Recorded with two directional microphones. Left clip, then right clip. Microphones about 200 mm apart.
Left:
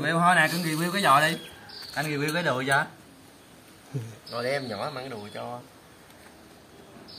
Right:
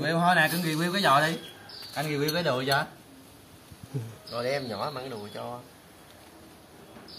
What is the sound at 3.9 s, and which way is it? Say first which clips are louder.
Speech: even; centre (ahead or behind).